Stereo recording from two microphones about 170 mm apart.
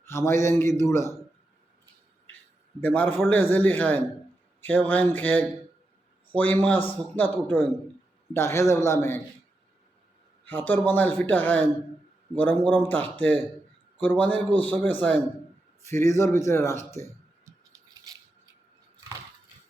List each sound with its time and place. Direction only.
0.0 s a man's voice: 15° left (ahead or behind)
2.8 s a man's voice: 10° left (ahead or behind)
10.4 s a man's voice: 10° left (ahead or behind)